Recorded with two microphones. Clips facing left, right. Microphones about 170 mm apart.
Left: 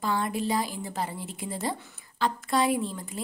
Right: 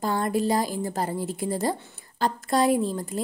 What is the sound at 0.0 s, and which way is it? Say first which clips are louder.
A woman's voice: right 4 dB; 40° right (ahead or behind).